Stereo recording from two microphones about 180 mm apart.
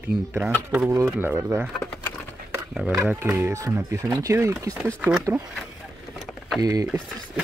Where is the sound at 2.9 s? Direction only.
15° right (ahead or behind).